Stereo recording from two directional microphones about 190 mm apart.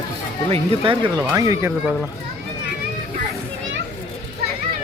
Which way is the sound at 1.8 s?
5° right (ahead or behind).